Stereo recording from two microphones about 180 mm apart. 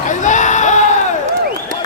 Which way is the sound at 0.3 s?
45° left (ahead or behind).